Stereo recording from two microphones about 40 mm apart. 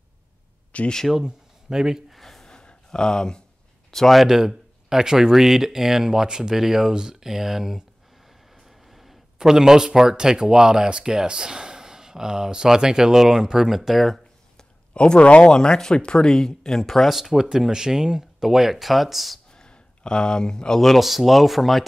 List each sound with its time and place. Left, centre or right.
0.7 s speech: left
1.2 s speech: centre
2.1 s a sound: centre
3.9 s speech: centre
4.2 s a man's voice: centre
14.6 s speech: left; by 17.2 s centre
17.2 s speech: centre
19.5 s a sound: left
20.8 s speech: centre